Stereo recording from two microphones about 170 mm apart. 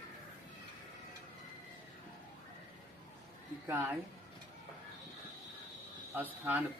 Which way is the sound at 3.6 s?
10° right (ahead or behind).